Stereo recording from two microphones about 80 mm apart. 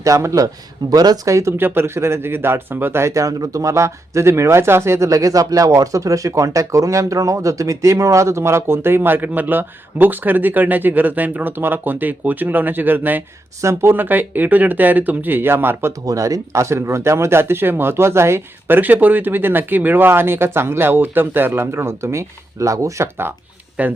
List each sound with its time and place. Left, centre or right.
0.0 s speech: right
1.5 s speech: right
13.6 s speech: right
13.9 s speech: right
16.0 s speech: right
23.8 s speech: centre